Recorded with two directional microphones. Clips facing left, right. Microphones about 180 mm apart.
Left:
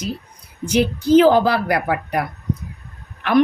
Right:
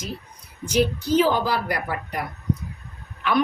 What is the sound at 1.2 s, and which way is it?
A woman's voice, 65° left (ahead or behind).